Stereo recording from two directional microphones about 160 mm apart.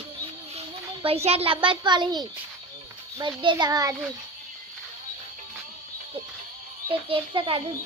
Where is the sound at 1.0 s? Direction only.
40° right (ahead or behind); by 3.9 s 20° right (ahead or behind).